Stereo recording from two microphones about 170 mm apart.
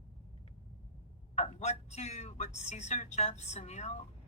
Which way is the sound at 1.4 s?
40° left (ahead or behind).